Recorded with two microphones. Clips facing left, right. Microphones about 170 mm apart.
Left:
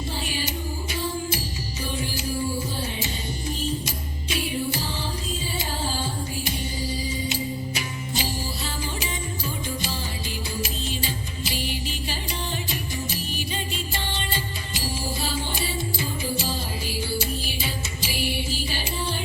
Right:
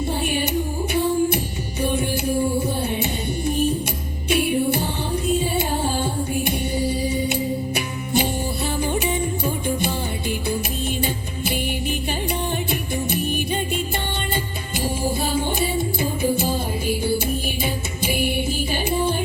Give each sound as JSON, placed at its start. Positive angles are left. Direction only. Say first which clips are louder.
{"t": 0.3, "sound": "music", "louder": "right 8 dB", "side_deg": -60}
{"t": 13.1, "sound": "music", "louder": "right 8 dB", "side_deg": -55}